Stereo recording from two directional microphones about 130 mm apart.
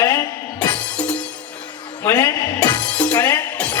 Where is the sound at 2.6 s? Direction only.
10° left (ahead or behind).